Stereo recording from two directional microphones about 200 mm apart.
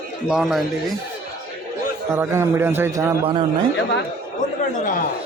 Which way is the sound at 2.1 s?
10° right (ahead or behind).